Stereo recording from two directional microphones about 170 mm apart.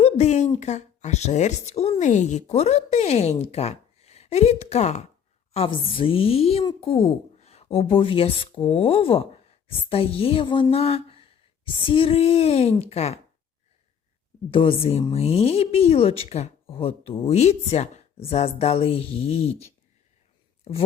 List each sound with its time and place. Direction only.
0.0 s a sound: 40° left (ahead or behind)
0.6 s a woman's voice: 45° left (ahead or behind)
14.5 s a woman's voice: 30° left (ahead or behind)
20.7 s a woman's voice: 35° left (ahead or behind)